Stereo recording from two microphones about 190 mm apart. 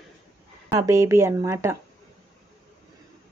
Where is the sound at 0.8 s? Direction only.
15° right (ahead or behind).